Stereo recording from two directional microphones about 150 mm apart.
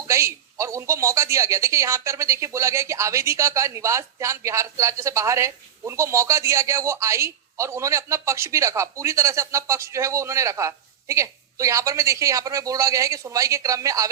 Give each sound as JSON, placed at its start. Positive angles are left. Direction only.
{"t": 0.0, "sound": "speech", "side_deg": -20}